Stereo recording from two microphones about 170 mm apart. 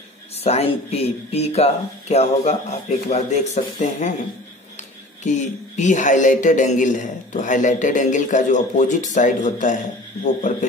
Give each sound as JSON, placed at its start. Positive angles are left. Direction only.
{"t": 0.4, "sound": "speech", "side_deg": 35}